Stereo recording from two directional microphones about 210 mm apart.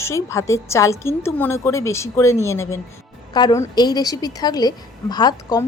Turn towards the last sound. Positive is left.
turn(degrees=20)  # may be behind; listen again after turning